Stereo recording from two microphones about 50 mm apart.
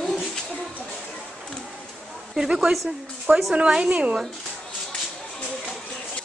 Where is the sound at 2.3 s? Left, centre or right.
Centre.